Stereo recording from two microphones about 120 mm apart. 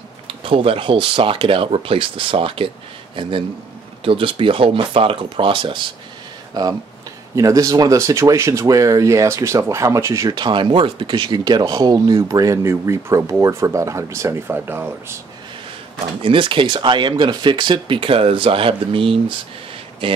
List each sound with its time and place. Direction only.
0.3 s speech: 50° right (ahead or behind)
6.6 s speech: 30° right (ahead or behind)
10.3 s speech: 40° right (ahead or behind); by 15.1 s 20° right (ahead or behind)
16.2 s speech: 45° right (ahead or behind)